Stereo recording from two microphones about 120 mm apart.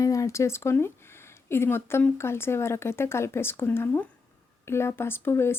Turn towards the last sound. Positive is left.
turn(degrees=20)  # may be behind; listen again after turning